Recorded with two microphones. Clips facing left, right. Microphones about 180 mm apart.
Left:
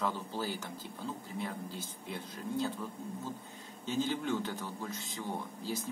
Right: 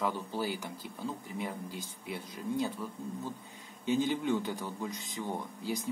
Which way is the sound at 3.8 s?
15° right (ahead or behind).